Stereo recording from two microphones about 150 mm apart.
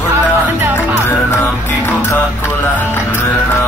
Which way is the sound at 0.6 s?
10° right (ahead or behind).